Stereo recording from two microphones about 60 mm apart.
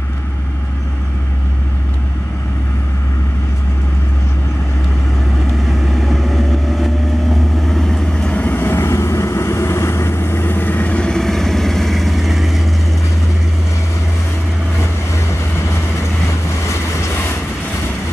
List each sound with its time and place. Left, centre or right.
5.7 s vehicle: centre
8.3 s vehicle: left
8.5 s vehicle: left
11.1 s vehicle: centre
16.4 s vehicle: left